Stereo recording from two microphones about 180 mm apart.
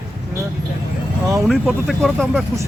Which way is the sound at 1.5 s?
Centre (ahead or behind).